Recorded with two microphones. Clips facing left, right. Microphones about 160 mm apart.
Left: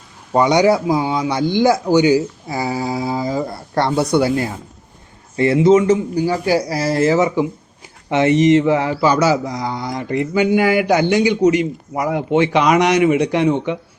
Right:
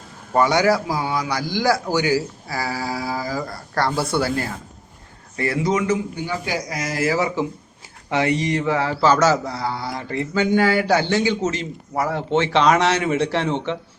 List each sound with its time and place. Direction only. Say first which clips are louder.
0.3 s a man's voice: left 4 dB; 20° left (ahead or behind)
8.1 s mantra: left 8 dB; 20° left (ahead or behind)